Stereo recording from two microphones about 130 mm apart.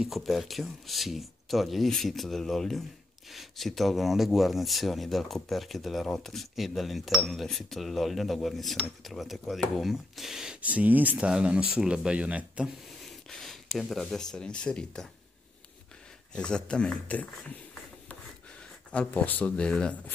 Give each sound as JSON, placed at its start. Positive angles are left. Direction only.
{"t": 0.0, "sound": "speech", "side_deg": 0}
{"t": 16.3, "sound": "speech", "side_deg": 5}
{"t": 18.9, "sound": "speech", "side_deg": 10}